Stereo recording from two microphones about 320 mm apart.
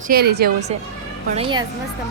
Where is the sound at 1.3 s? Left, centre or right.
Centre.